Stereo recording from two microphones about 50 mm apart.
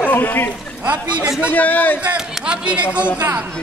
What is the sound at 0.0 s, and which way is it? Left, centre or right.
Speech, left.